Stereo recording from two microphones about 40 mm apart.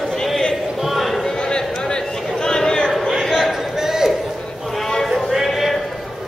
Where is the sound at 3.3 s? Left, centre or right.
Centre.